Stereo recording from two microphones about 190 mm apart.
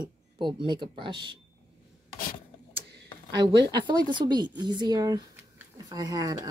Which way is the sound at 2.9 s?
60° right (ahead or behind).